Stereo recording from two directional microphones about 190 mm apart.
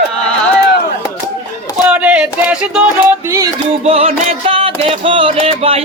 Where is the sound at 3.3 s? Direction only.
20° right (ahead or behind).